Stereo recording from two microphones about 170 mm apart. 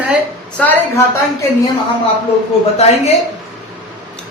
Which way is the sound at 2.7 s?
40° left (ahead or behind).